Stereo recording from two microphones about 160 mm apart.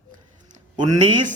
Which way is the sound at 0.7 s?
30° right (ahead or behind).